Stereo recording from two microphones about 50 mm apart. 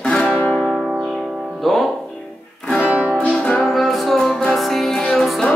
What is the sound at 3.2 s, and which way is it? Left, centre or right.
Music, left.